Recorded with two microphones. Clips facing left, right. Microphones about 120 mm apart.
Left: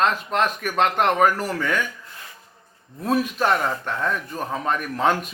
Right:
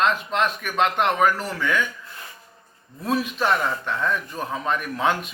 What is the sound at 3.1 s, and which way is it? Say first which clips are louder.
Speech: left 2 dB; 45° left (ahead or behind).